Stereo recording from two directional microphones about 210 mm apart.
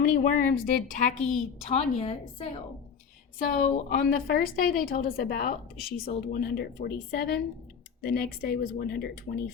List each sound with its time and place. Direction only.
0.1 s a woman's voice: 40° left (ahead or behind)
3.3 s a woman's voice: 40° left (ahead or behind)